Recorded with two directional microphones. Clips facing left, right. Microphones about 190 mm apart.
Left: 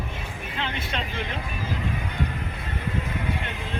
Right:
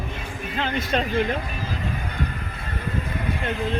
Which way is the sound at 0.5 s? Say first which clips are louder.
Right 7 dB; 45° right (ahead or behind).